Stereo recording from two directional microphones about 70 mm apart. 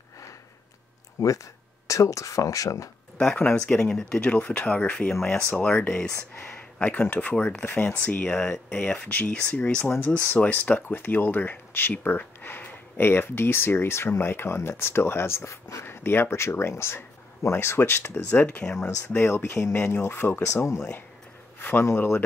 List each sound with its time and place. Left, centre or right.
1.2 s speech: left
3.5 s speech: centre
6.3 s a sound: centre
7.0 s speech: left
8.4 s speech: centre; by 18.1 s left
18.1 s speech: left
19.0 s speech: left
21.5 s speech: left